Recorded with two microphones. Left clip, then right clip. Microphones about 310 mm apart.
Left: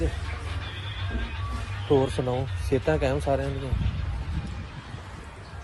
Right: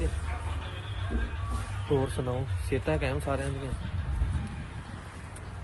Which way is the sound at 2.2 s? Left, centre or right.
Centre.